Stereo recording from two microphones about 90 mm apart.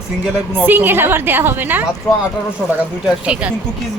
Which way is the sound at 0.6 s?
20° right (ahead or behind).